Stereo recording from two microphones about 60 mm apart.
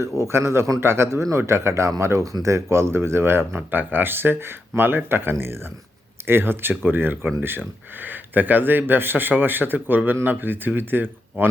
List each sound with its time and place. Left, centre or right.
0.0 s speech: right